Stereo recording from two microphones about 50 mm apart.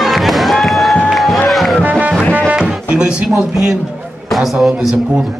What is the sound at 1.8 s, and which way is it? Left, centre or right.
Music, right.